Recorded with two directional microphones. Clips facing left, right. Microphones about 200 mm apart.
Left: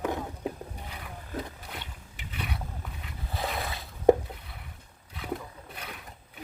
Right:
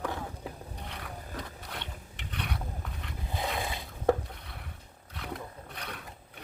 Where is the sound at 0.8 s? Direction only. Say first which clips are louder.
Right 1 dB; 5° left (ahead or behind).